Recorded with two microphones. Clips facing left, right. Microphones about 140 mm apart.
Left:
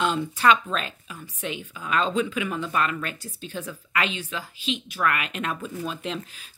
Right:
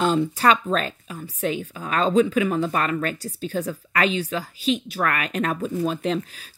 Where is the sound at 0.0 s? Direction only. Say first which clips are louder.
Right 3 dB; 35° right (ahead or behind).